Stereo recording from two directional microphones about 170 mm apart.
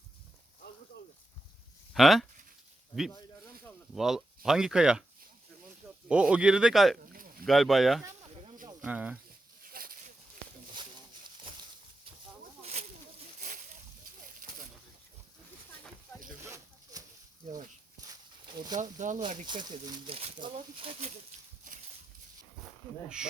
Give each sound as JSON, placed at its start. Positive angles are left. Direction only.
{"t": 1.9, "sound": "speech", "side_deg": 0}
{"t": 3.9, "sound": "speech", "side_deg": 0}
{"t": 6.1, "sound": "speech", "side_deg": -5}
{"t": 9.6, "sound": "a sound", "side_deg": -60}
{"t": 18.8, "sound": "speech", "side_deg": -45}
{"t": 19.5, "sound": "speech", "side_deg": -30}
{"t": 23.0, "sound": "speech", "side_deg": -5}